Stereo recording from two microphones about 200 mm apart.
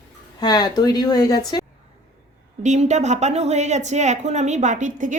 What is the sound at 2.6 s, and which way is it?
Speech, 35° right (ahead or behind).